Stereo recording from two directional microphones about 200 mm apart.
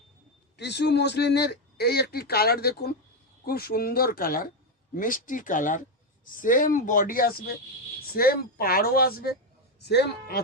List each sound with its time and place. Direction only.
0.5 s speech: 60° left (ahead or behind)